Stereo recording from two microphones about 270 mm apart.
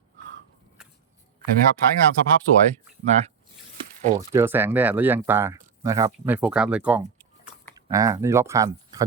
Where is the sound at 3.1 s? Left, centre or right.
Right.